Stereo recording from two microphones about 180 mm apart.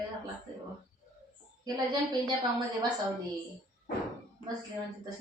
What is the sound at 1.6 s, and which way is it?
Speech, 20° right (ahead or behind).